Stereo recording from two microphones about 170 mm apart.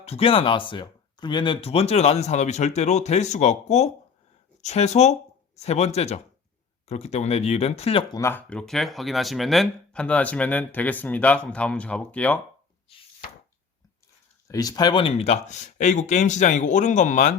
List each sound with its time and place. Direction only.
0.0 s speech: 35° left (ahead or behind)
8.1 s speech: 15° left (ahead or behind)
14.4 s speech: 20° left (ahead or behind); by 17.3 s 45° left (ahead or behind)